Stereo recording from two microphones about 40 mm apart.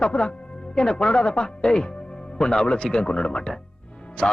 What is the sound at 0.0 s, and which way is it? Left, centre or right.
Speech, left.